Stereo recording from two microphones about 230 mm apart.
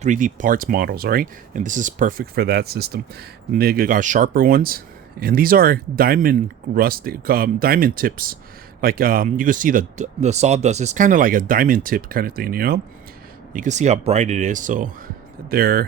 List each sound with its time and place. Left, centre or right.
0.0 s speech: right